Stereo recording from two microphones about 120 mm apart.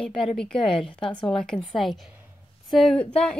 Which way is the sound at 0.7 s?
50° left (ahead or behind).